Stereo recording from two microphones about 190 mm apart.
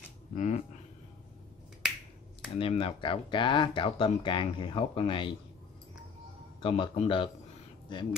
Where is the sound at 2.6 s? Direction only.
30° left (ahead or behind).